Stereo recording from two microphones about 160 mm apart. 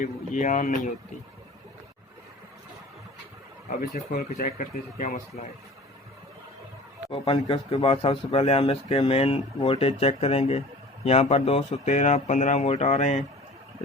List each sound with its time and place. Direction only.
0.0 s speech: 50° left (ahead or behind)
3.7 s speech: 65° left (ahead or behind)
4.4 s speech: 60° left (ahead or behind)
7.1 s speech: 30° left (ahead or behind)